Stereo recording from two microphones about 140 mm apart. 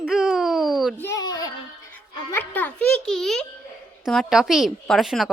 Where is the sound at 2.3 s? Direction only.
10° left (ahead or behind).